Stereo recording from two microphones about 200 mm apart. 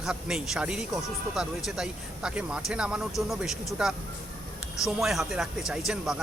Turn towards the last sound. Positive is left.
turn(degrees=-5)  # may be behind; listen again after turning